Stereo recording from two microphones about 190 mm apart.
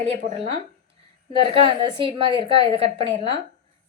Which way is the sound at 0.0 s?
35° right (ahead or behind).